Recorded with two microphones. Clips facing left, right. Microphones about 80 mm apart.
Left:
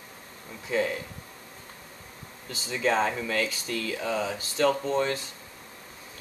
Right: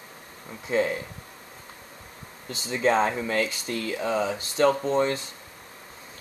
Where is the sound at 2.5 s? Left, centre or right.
Right.